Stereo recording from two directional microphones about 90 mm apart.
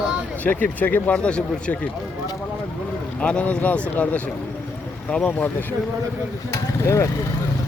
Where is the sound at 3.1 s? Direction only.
15° left (ahead or behind).